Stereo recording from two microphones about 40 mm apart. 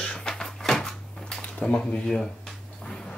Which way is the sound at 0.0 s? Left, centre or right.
Left.